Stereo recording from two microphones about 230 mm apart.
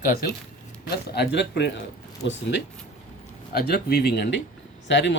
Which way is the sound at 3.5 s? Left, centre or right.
Left.